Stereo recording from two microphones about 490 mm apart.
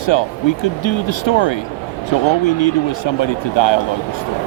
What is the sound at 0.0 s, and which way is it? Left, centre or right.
Speech, left.